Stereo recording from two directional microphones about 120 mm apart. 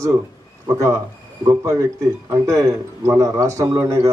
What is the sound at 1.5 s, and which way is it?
A man's voice, 25° right (ahead or behind).